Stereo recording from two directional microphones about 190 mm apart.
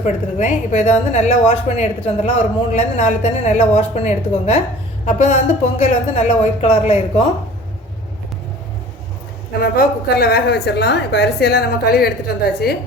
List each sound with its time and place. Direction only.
0.0 s a woman's voice: 40° left (ahead or behind)
9.6 s a woman's voice: 50° left (ahead or behind)